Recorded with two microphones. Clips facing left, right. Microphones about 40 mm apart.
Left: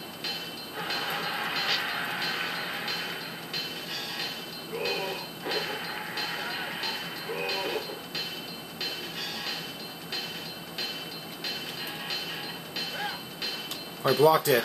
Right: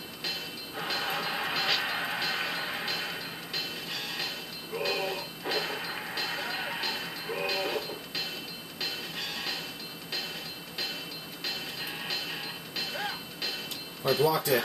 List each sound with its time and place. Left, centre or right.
0.7 s music: centre
4.7 s a sound: centre
5.4 s music: centre
9.2 s music: centre
12.7 s music: centre
14.2 s speech: left